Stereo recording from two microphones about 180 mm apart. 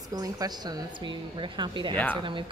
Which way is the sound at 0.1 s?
20° right (ahead or behind).